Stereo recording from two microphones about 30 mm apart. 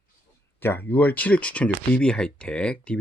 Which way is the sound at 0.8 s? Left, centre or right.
Left.